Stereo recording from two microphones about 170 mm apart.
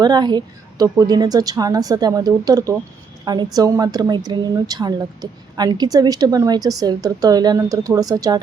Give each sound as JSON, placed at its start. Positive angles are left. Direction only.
{"t": 0.0, "sound": "a woman's voice", "side_deg": -25}